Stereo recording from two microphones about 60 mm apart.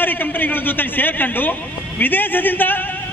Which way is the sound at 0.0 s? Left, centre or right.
Left.